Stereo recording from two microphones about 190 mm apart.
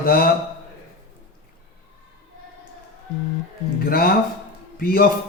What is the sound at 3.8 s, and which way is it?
Speech, 50° left (ahead or behind).